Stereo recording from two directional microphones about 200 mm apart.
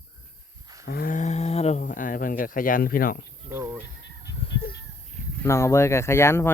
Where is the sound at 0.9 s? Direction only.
50° left (ahead or behind).